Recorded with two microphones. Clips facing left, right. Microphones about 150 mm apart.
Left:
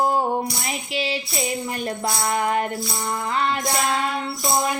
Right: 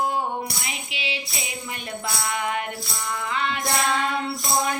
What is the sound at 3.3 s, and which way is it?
Music, 40° left (ahead or behind).